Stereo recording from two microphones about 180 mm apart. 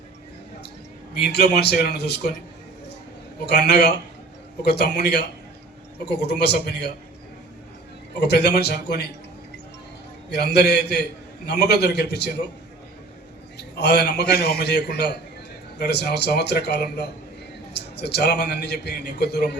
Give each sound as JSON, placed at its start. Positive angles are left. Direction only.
{"t": 1.1, "sound": "a man's voice", "side_deg": 65}
{"t": 3.4, "sound": "a man's voice", "side_deg": 70}
{"t": 8.2, "sound": "a man's voice", "side_deg": 65}
{"t": 10.2, "sound": "a man's voice", "side_deg": 65}
{"t": 13.6, "sound": "a man's voice", "side_deg": 70}